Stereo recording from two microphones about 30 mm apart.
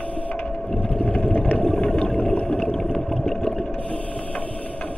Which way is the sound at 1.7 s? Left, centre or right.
Left.